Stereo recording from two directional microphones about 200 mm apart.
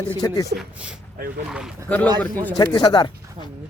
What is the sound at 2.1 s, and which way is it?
Speech, 20° right (ahead or behind).